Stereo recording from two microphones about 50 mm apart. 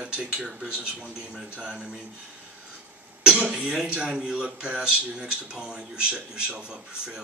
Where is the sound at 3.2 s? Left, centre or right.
Centre.